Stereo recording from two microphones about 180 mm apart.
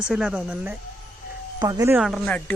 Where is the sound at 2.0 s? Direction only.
Centre (ahead or behind).